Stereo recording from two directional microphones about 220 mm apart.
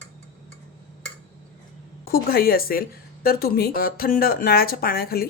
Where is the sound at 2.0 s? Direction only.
40° left (ahead or behind).